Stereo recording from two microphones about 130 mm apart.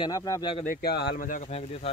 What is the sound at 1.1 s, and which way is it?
Speech, 80° left.